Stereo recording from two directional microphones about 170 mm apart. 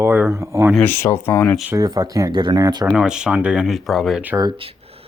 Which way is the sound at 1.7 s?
25° right (ahead or behind).